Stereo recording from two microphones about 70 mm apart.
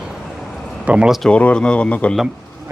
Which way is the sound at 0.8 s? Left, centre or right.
Centre.